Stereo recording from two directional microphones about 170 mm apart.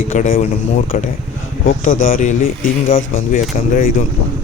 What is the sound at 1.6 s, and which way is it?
Speech, 50° left (ahead or behind).